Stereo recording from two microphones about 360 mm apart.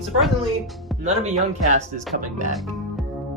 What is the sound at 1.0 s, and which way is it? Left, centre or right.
Speech, centre.